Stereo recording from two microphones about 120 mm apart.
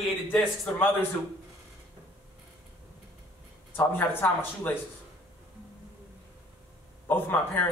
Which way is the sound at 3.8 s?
20° left (ahead or behind).